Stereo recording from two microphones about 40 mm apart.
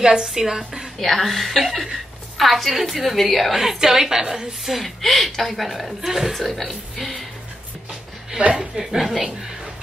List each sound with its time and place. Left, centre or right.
0.0 s a woman's voice: centre
0.9 s a woman's voice: centre
3.5 s a woman's voice: centre
4.6 s a woman's voice: centre
8.5 s a woman's voice: centre